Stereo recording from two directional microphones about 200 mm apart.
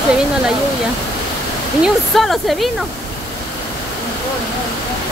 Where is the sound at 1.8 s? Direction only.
Centre (ahead or behind).